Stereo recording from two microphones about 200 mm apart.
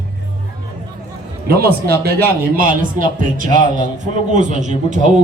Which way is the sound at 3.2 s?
40° right (ahead or behind).